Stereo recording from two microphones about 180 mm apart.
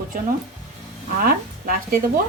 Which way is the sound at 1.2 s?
55° right (ahead or behind).